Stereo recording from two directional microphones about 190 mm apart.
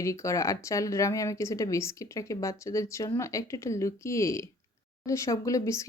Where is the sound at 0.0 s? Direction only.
15° left (ahead or behind).